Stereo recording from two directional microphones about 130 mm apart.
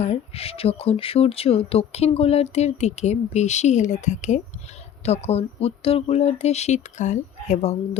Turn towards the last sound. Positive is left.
turn(degrees=60)  # may be behind; listen again after turning